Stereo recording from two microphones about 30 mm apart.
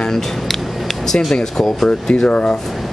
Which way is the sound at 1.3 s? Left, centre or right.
Left.